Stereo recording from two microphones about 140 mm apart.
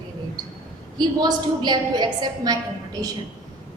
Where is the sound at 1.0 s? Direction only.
30° right (ahead or behind).